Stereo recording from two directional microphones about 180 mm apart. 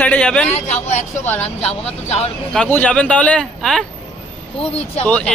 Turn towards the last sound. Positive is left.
turn(degrees=5)  # may be behind; listen again after turning